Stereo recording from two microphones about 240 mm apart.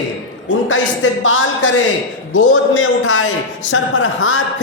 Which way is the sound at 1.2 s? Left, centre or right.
Left.